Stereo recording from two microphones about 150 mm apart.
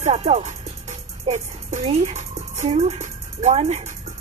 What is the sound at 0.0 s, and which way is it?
Speech, 45° right (ahead or behind).